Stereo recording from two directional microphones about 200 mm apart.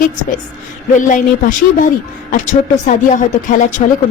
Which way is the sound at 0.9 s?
40° left (ahead or behind).